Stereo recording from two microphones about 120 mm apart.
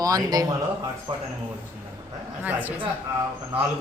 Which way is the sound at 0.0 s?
30° right (ahead or behind).